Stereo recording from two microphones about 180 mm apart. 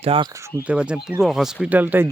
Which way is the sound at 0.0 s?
30° right (ahead or behind).